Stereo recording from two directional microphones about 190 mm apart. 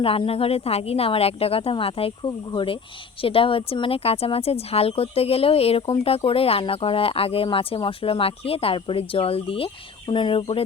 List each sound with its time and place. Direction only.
0.0 s speech: 30° left (ahead or behind)